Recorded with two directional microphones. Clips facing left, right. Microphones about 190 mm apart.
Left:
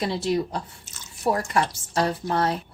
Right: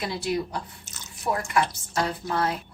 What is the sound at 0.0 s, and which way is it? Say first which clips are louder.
A woman's voice: left 4 dB; 30° left (ahead or behind).